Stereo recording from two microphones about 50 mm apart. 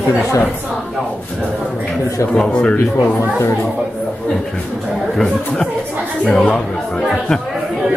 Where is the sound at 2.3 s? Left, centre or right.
Left.